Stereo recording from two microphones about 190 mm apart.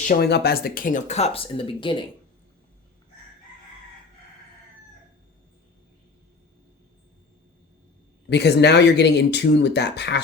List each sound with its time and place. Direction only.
0.2 s speech: 60° left (ahead or behind); by 2.0 s 25° left (ahead or behind)
8.3 s speech: 60° left (ahead or behind)